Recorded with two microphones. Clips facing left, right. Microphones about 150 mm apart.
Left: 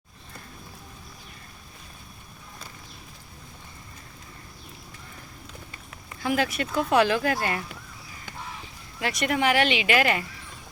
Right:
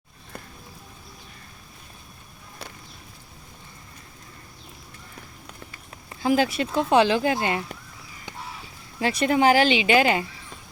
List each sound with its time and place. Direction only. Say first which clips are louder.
6.2 s speech: right 4 dB; 30° right (ahead or behind)
9.0 s speech: right 5 dB; 30° right (ahead or behind)